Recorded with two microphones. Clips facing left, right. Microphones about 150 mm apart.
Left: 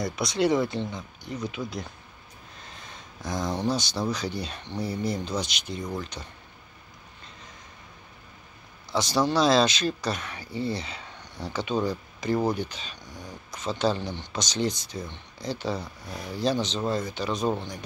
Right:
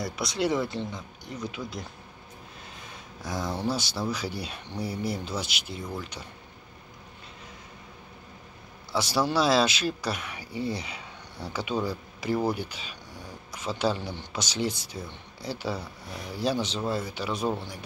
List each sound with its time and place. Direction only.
0.0 s speech: 5° right (ahead or behind)
2.6 s a sound: 10° right (ahead or behind)
4.1 s speech: 10° right (ahead or behind)
8.9 s speech: 10° right (ahead or behind)